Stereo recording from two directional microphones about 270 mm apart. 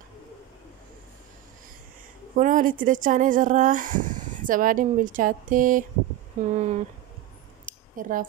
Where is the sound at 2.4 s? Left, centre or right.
Right.